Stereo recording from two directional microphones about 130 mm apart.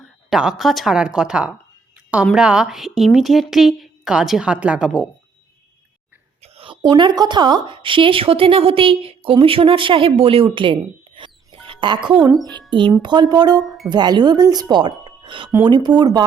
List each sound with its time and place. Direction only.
0.0 s a woman's voice: 5° right (ahead or behind)
6.4 s a sound: 45° right (ahead or behind)
6.9 s a woman's voice: 35° right (ahead or behind)
13.6 s speech: centre (ahead or behind)
13.9 s a woman's voice: 35° right (ahead or behind)